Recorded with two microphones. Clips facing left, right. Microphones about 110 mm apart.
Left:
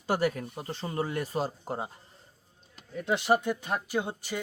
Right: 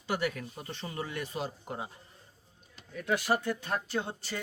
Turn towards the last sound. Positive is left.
turn(degrees=15)  # may be behind; listen again after turning